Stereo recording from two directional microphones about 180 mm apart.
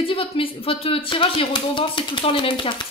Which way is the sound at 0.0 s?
30° left (ahead or behind).